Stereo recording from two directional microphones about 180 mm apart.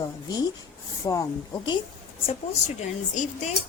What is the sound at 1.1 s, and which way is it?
Speech, 20° left (ahead or behind).